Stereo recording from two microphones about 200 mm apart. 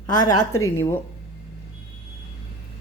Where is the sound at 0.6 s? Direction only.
15° left (ahead or behind).